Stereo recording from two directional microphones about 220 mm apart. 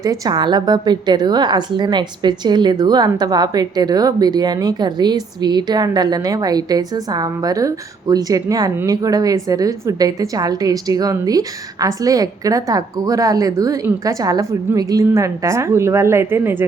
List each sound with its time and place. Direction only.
0.0 s a woman's voice: 15° right (ahead or behind)